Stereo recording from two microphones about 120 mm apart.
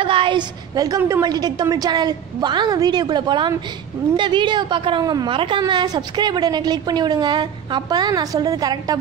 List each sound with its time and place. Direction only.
0.0 s a woman's voice: 45° right (ahead or behind)
5.3 s a woman's voice: 50° right (ahead or behind)
5.6 s a woman's voice: 35° right (ahead or behind)